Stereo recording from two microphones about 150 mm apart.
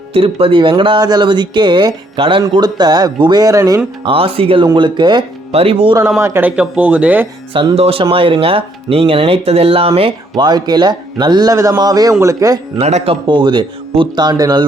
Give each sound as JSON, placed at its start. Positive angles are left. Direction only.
{"t": 0.1, "sound": "speech", "side_deg": -40}
{"t": 4.0, "sound": "speech", "side_deg": -40}
{"t": 5.5, "sound": "speech", "side_deg": -40}
{"t": 6.1, "sound": "speech", "side_deg": -15}
{"t": 7.5, "sound": "speech", "side_deg": -35}
{"t": 12.8, "sound": "speech", "side_deg": -45}
{"t": 13.2, "sound": "speech", "side_deg": -30}